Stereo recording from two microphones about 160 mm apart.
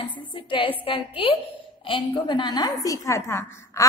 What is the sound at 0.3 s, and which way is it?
A woman's voice, 30° left (ahead or behind).